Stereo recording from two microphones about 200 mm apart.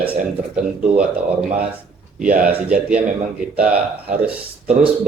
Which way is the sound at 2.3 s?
5° right (ahead or behind).